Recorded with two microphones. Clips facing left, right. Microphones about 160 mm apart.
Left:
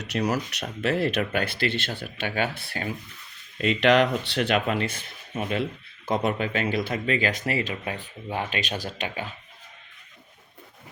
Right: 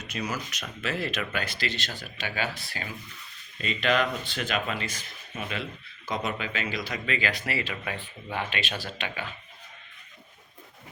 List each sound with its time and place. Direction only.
0.0 s speech: 70° left (ahead or behind); by 2.9 s 55° left (ahead or behind)
3.6 s speech: 70° left (ahead or behind); by 7.0 s 55° left (ahead or behind)
7.0 s speech: 40° left (ahead or behind)